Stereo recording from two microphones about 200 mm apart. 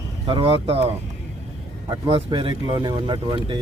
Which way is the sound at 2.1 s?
25° right (ahead or behind).